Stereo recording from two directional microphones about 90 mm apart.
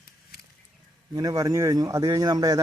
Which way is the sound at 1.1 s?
40° right (ahead or behind).